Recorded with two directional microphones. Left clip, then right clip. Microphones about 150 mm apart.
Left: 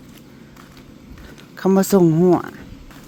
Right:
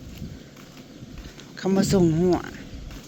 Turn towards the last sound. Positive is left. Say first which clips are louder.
# left 7 dB
turn(degrees=25)  # may be behind; listen again after turning